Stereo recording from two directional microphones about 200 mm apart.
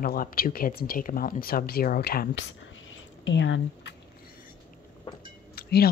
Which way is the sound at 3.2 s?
65° left (ahead or behind).